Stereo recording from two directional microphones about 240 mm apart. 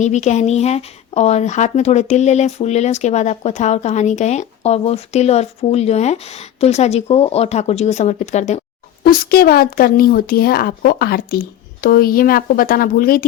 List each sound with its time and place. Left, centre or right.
0.0 s a woman's voice: left